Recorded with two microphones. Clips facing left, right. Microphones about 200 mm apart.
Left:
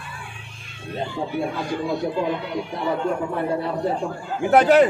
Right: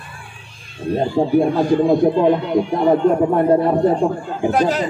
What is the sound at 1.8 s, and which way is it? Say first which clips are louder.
Speech: right 8 dB; 50° right (ahead or behind).